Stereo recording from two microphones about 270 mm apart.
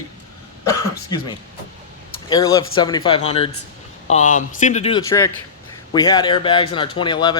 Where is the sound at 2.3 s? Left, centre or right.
Centre.